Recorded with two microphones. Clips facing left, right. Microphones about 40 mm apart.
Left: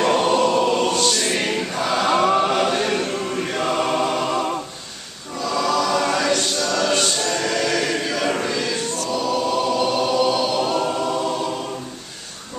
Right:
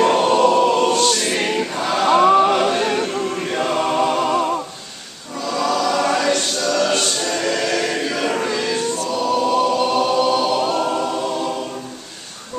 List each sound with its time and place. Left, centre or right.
0.0 s choir: centre